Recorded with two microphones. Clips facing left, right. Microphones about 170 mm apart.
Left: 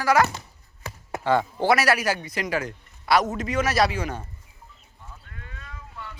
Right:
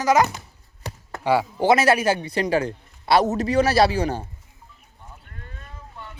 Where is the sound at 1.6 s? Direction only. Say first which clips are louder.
Right 5 dB; 25° right (ahead or behind).